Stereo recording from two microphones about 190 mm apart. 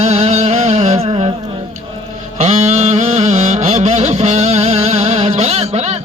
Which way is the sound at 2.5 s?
35° right (ahead or behind).